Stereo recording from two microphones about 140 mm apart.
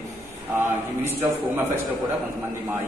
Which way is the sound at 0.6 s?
15° right (ahead or behind).